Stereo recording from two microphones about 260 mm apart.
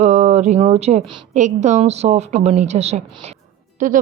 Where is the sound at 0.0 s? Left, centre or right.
Right.